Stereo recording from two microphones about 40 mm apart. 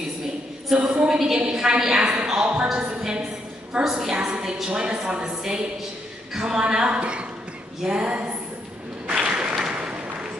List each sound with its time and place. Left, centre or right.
0.7 s a sound: right
1.4 s a woman's voice: right
6.6 s a woman's voice: right
9.0 s applause: right